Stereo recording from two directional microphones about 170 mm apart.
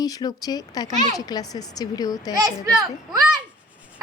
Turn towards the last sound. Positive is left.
turn(degrees=-20)  # may be behind; listen again after turning